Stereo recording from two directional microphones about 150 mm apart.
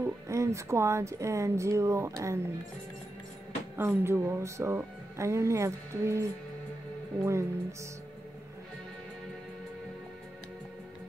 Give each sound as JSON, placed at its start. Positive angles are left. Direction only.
{"t": 0.0, "sound": "speech", "side_deg": -20}
{"t": 3.7, "sound": "speech", "side_deg": -15}